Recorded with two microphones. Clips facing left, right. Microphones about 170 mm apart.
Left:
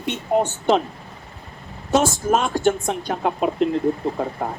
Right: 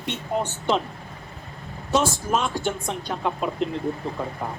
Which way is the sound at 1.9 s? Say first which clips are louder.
Left 4 dB; 45° left (ahead or behind).